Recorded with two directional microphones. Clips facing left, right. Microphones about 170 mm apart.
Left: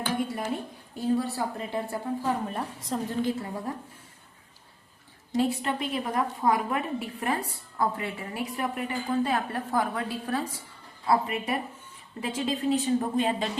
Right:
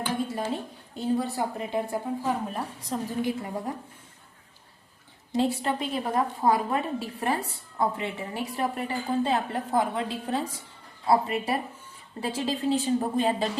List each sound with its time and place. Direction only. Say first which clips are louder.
0.9 s a woman's voice: even; 20° right (ahead or behind)
2.5 s a woman's voice: even; centre (ahead or behind)
3.2 s a woman's voice: even; 15° right (ahead or behind)
5.3 s a woman's voice: right 1 dB; 30° right (ahead or behind)